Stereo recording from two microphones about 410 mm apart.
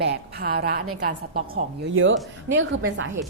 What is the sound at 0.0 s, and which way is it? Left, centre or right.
A woman's voice, right.